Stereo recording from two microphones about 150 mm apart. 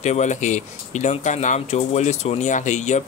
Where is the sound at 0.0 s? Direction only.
50° left (ahead or behind).